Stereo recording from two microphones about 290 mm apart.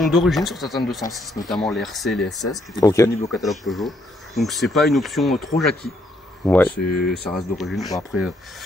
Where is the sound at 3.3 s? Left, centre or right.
Centre.